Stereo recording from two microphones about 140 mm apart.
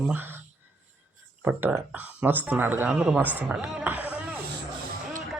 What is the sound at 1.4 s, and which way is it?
Speech, 10° right (ahead or behind).